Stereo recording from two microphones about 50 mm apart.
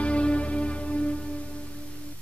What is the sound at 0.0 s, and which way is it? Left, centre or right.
Music, left.